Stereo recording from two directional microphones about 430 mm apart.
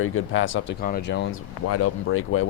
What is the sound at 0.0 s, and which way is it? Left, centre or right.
Speech, left.